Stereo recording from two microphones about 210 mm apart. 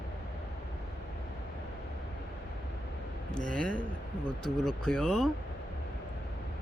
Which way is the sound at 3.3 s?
5° left (ahead or behind).